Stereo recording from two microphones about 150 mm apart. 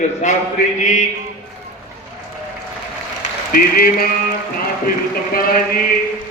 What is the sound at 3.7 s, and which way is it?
Mantra, 75° left (ahead or behind).